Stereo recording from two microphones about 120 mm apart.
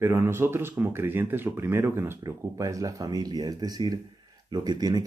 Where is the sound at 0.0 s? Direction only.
20° right (ahead or behind).